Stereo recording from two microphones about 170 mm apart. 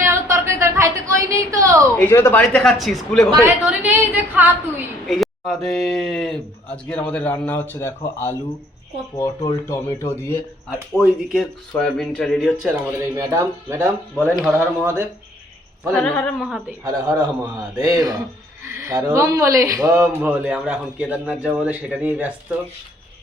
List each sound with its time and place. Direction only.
0.0 s a sound: 15° right (ahead or behind)
2.0 s a man's voice: 15° left (ahead or behind)
3.4 s a man's voice: 10° right (ahead or behind)
5.0 s speech: centre (ahead or behind)
10.7 s a man's voice: centre (ahead or behind)
13.1 s a man's voice: 15° right (ahead or behind)
15.9 s a man's voice: 5° left (ahead or behind)
17.7 s a man's voice: 15° right (ahead or behind)